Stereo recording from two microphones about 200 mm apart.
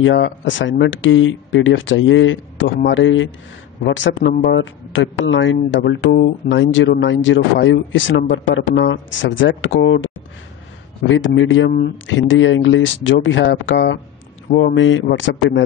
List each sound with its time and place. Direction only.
0.0 s speech: 65° left (ahead or behind)